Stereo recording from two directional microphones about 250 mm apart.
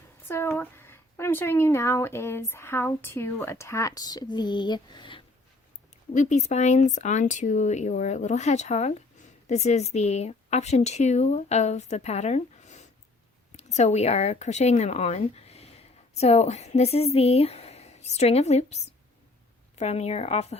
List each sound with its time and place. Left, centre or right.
0.3 s speech: centre; by 20.6 s left